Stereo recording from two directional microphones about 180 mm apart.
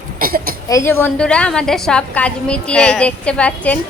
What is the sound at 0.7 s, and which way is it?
A woman's voice, 10° left (ahead or behind).